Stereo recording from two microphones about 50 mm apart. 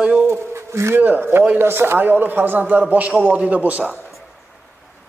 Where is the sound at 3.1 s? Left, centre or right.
Right.